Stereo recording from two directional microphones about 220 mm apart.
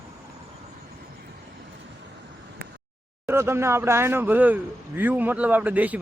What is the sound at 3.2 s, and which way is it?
Speech, 10° right (ahead or behind).